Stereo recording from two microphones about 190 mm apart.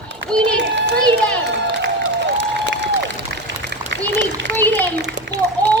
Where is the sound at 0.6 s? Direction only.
65° right (ahead or behind).